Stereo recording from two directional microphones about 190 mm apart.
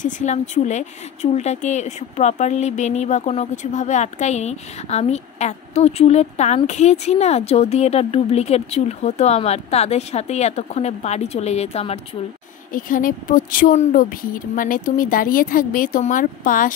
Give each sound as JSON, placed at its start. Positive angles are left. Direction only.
{"t": 0.0, "sound": "a woman's voice", "side_deg": 40}
{"t": 12.7, "sound": "speech", "side_deg": 45}